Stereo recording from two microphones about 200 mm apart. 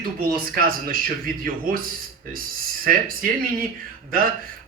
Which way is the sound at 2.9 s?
45° right (ahead or behind).